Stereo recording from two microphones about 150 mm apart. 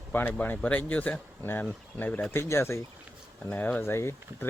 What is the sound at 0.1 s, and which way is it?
Speech, 15° left (ahead or behind).